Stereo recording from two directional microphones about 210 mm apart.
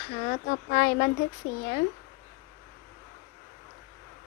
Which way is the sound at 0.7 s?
45° left (ahead or behind).